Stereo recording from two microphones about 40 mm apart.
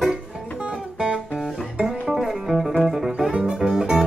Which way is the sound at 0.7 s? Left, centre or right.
Right.